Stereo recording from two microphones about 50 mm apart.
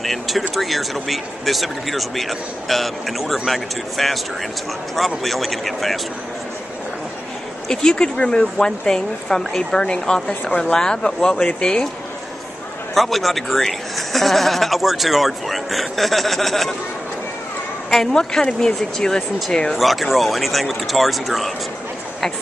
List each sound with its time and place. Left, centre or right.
0.0 s speech: centre
7.6 s speech: centre
12.9 s speech: centre
17.8 s speech: centre
19.8 s speech: centre